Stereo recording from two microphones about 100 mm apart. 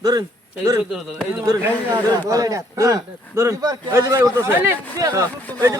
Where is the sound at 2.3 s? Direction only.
35° right (ahead or behind).